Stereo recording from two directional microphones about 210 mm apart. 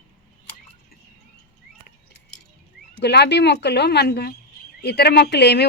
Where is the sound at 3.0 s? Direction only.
55° left (ahead or behind).